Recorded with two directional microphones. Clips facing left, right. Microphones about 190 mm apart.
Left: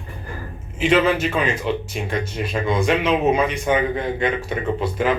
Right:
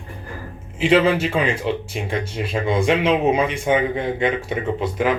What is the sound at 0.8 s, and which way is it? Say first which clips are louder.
Speech: right 1 dB; 30° right (ahead or behind).